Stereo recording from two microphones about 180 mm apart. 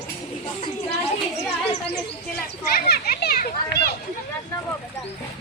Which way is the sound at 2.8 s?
60° left (ahead or behind).